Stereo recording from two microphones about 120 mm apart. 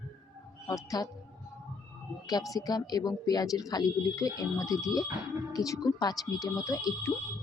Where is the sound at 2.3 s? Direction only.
30° left (ahead or behind).